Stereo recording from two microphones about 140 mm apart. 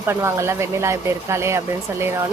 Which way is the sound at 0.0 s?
20° right (ahead or behind).